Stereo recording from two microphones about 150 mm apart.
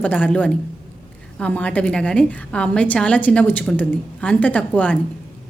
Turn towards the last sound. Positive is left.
turn(degrees=10)  # may be behind; listen again after turning